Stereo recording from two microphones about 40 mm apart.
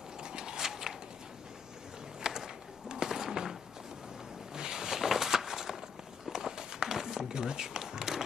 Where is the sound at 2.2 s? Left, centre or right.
Centre.